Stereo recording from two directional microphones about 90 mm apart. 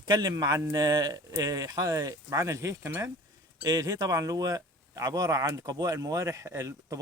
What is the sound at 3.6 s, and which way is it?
Speech, 45° right (ahead or behind).